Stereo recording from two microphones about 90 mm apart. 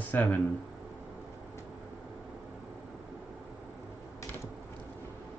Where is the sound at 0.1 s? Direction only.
20° left (ahead or behind).